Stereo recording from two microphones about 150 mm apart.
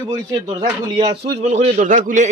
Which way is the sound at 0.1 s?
25° right (ahead or behind).